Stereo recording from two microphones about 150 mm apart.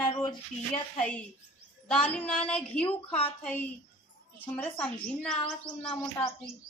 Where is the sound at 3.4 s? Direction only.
10° left (ahead or behind).